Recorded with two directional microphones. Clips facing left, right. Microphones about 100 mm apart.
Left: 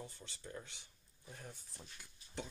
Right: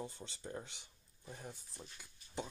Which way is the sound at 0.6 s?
20° right (ahead or behind).